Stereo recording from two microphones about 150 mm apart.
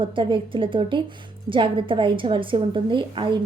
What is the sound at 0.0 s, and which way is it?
A woman's voice, 35° right (ahead or behind).